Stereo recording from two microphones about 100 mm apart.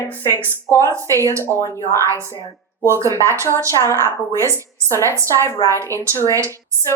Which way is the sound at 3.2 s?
30° right (ahead or behind).